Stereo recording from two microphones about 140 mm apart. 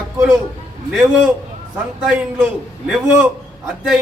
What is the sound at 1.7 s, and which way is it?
A man's voice, 10° right (ahead or behind).